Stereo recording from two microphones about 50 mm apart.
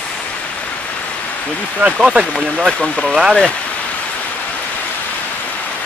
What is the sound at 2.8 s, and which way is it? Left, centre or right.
Speech, left.